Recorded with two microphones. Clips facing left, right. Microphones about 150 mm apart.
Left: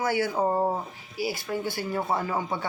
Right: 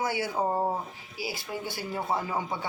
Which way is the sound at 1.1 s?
50° left (ahead or behind).